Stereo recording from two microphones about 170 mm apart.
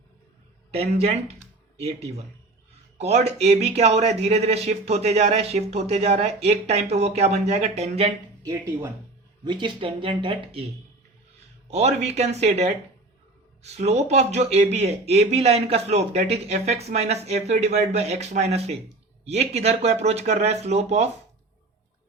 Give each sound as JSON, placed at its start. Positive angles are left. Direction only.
{"t": 0.7, "sound": "speech", "side_deg": -35}
{"t": 3.0, "sound": "speech", "side_deg": -40}
{"t": 9.4, "sound": "speech", "side_deg": -25}
{"t": 11.7, "sound": "speech", "side_deg": -40}